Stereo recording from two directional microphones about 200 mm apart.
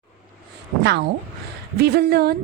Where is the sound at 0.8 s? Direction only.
60° right (ahead or behind).